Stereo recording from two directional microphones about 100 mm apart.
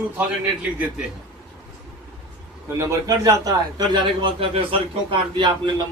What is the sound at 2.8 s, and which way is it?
A man's voice, 35° right (ahead or behind).